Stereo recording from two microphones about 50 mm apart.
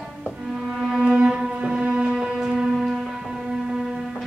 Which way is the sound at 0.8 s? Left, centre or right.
Centre.